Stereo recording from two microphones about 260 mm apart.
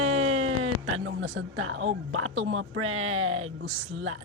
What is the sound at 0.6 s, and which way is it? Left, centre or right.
Speech, right.